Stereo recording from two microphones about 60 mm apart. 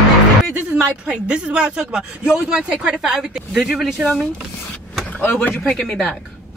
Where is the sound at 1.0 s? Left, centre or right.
Centre.